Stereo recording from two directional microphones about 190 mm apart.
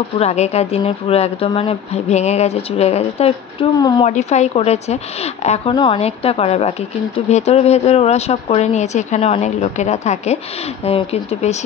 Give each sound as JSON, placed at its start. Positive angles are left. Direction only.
{"t": 0.2, "sound": "speech", "side_deg": 35}